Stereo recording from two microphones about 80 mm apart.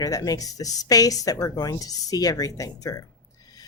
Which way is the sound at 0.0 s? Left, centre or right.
Left.